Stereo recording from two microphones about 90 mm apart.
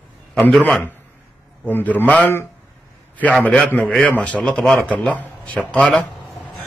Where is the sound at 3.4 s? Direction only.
15° left (ahead or behind).